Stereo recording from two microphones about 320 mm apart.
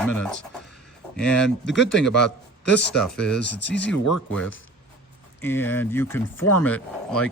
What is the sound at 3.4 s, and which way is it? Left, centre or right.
Speech, left.